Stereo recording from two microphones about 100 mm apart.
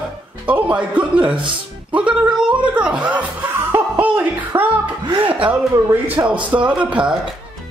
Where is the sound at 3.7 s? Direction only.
20° right (ahead or behind).